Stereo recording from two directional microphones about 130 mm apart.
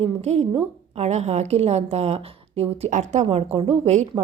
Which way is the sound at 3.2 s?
45° right (ahead or behind).